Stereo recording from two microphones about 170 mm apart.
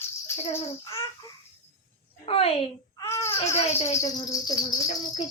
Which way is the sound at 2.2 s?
35° left (ahead or behind).